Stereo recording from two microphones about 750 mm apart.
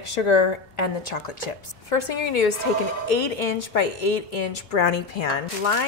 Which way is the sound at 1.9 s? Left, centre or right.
Left.